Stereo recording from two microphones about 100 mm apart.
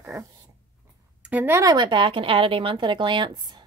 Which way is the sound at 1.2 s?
20° right (ahead or behind).